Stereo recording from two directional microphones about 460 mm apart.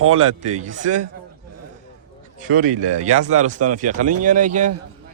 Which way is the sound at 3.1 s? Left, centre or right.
Right.